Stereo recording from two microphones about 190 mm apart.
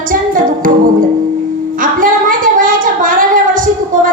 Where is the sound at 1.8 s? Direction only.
45° right (ahead or behind).